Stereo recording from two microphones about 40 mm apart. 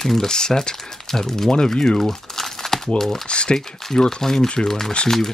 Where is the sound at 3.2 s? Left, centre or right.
Left.